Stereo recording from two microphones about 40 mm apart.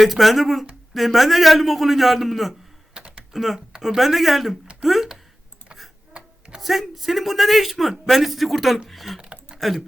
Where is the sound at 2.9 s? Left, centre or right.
Right.